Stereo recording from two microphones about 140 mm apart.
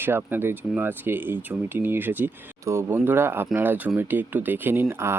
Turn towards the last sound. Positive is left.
turn(degrees=-20)  # may be behind; listen again after turning